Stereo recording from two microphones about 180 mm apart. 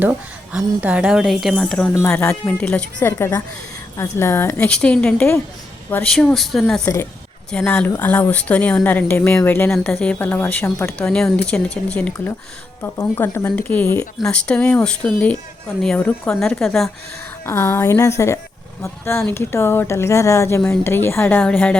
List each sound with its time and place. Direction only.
0.0 s speech: 10° right (ahead or behind)
1.9 s speech: 15° left (ahead or behind)
6.8 s speech: 15° left (ahead or behind)
17.4 s speech: 15° left (ahead or behind)